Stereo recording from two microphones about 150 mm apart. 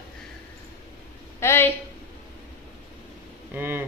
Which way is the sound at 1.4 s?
15° left (ahead or behind).